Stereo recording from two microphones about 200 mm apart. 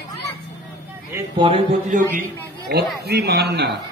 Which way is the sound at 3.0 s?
55° right (ahead or behind).